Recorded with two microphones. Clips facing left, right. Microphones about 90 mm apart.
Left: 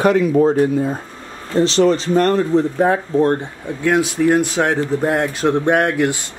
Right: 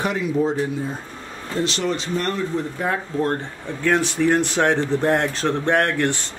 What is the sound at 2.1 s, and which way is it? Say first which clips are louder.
Speech: left 9 dB; 45° left (ahead or behind).